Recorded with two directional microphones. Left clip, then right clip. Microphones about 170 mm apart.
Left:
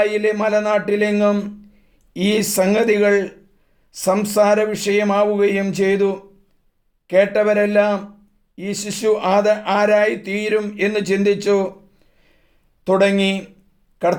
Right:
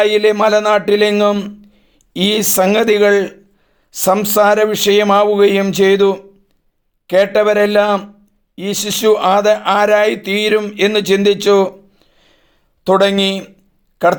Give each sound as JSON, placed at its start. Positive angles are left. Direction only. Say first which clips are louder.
{"t": 0.0, "sound": "speech", "louder": "right 6 dB", "side_deg": -25}
{"t": 12.2, "sound": "a sound", "louder": "right 7 dB", "side_deg": -20}
{"t": 12.9, "sound": "speech", "louder": "right 4 dB", "side_deg": -20}